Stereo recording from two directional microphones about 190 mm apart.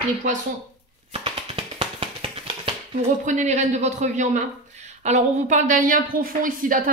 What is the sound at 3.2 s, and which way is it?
A man's voice, 40° right (ahead or behind).